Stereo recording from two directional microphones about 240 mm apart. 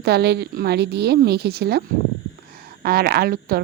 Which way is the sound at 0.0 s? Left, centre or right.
Right.